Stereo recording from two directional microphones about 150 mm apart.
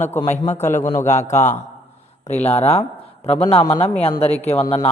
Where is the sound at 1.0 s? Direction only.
55° left (ahead or behind).